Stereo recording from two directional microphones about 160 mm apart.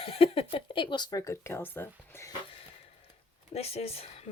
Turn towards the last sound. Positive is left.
turn(degrees=40)  # may be behind; listen again after turning